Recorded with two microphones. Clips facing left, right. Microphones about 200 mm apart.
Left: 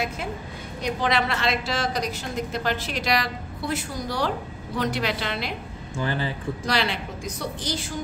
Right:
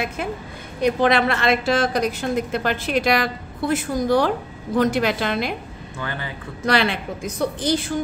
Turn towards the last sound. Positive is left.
turn(degrees=-55)  # may be behind; listen again after turning